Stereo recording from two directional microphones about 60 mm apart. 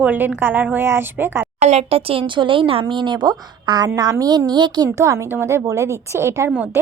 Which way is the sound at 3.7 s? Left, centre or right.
Right.